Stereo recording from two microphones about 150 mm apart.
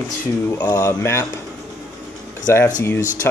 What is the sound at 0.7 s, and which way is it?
Speech, 20° left (ahead or behind).